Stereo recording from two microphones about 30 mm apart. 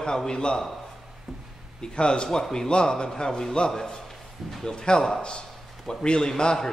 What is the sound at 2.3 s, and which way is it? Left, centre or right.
A man's voice, centre.